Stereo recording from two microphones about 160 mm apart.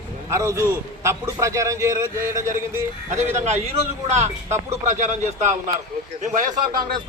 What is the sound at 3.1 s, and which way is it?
Speech, 45° right (ahead or behind).